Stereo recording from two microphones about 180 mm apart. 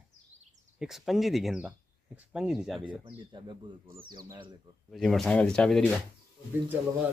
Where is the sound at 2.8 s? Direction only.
25° right (ahead or behind).